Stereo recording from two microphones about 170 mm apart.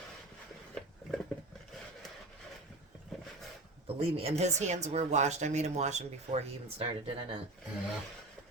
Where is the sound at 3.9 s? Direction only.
35° right (ahead or behind).